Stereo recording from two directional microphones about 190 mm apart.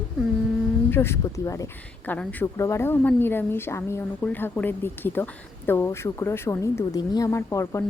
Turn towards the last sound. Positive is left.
turn(degrees=15)  # may be behind; listen again after turning